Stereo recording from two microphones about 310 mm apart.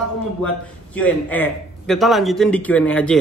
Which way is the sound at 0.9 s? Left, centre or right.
Centre.